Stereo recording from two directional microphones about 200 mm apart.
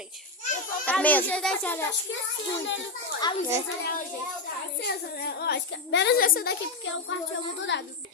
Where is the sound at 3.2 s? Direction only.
20° left (ahead or behind).